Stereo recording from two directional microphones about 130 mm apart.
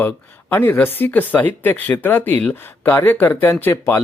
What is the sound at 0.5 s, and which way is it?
Speech, 15° left (ahead or behind).